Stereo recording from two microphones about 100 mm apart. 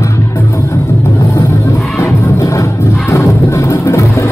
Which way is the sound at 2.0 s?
30° left (ahead or behind).